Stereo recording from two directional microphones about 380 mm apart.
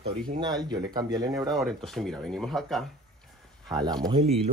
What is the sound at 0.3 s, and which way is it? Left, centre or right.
Speech, centre.